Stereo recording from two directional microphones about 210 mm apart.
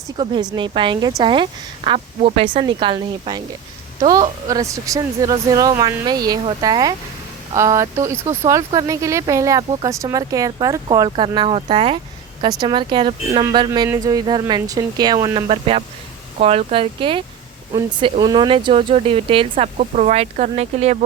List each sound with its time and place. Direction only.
0.2 s speech: 20° right (ahead or behind)